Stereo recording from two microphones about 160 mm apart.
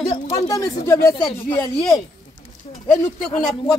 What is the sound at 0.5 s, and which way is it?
Speech, 20° left (ahead or behind).